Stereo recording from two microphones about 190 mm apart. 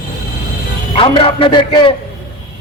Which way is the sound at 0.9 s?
30° left (ahead or behind).